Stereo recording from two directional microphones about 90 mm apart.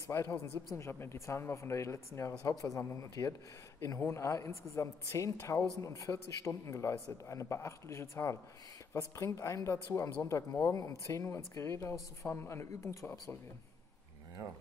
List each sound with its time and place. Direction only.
0.1 s speech: 35° left (ahead or behind)